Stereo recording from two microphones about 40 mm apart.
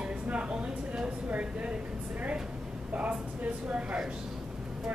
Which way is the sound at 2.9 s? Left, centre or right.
Right.